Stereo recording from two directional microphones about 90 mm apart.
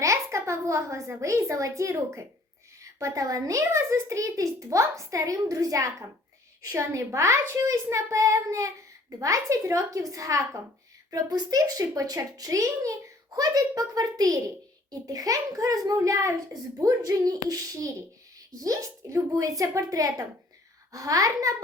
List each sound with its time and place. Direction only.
0.0 s a child's voice: 35° right (ahead or behind)